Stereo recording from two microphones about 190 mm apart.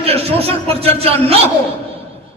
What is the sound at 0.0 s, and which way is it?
Speech, 30° right (ahead or behind).